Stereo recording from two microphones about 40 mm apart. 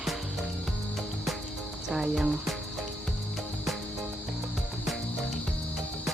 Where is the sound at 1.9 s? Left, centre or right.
Centre.